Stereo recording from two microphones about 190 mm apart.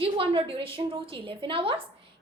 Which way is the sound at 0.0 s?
30° right (ahead or behind).